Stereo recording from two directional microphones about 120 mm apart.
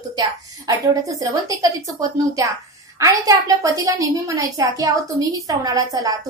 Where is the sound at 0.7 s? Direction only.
30° right (ahead or behind).